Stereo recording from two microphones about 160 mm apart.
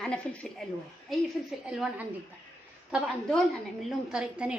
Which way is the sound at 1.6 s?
5° right (ahead or behind).